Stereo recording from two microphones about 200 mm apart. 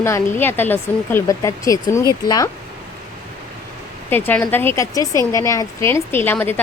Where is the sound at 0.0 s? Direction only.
10° left (ahead or behind).